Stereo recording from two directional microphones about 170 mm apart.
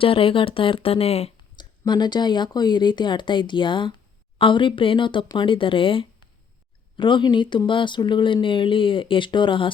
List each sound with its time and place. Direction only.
0.0 s speech: 30° left (ahead or behind)
1.8 s speech: 25° left (ahead or behind)